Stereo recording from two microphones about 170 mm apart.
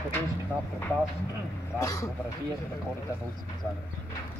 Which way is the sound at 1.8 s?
15° left (ahead or behind).